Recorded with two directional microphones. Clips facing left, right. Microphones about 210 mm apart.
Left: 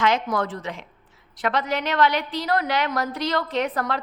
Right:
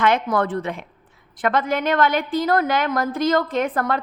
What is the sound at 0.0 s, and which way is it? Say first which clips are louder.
A woman's voice: right 3 dB; 55° right (ahead or behind).